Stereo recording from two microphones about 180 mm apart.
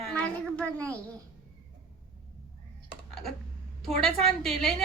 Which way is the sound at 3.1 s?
Centre (ahead or behind).